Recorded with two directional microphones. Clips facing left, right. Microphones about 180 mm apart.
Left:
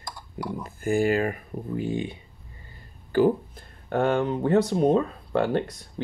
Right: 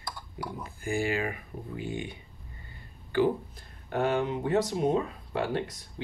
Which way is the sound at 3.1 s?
50° left (ahead or behind).